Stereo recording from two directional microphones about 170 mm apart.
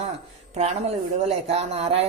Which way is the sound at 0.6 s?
40° right (ahead or behind).